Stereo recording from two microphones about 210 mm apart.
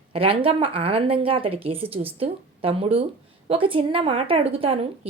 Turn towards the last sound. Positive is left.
turn(degrees=-30)  # may be behind; listen again after turning